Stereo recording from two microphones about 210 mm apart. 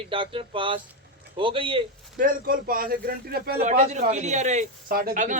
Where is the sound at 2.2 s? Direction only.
40° right (ahead or behind).